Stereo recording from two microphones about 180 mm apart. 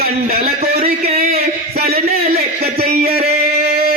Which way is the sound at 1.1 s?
55° right (ahead or behind).